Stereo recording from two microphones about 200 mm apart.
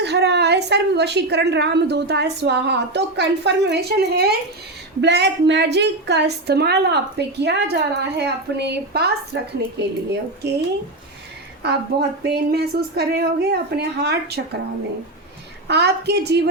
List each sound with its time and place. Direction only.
0.0 s a woman's voice: 55° right (ahead or behind)
11.6 s speech: 55° right (ahead or behind)
15.6 s a woman's voice: 55° right (ahead or behind)